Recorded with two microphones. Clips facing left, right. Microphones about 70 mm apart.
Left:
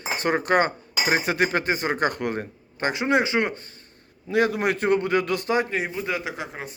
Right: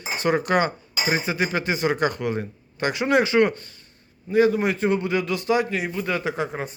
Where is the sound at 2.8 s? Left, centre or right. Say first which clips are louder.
Right 2 dB; left.